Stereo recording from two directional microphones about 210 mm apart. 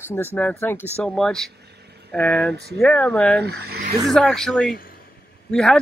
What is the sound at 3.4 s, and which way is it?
Speech, 50° right (ahead or behind).